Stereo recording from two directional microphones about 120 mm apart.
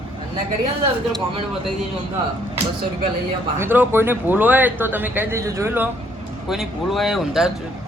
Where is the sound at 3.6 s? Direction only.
15° right (ahead or behind).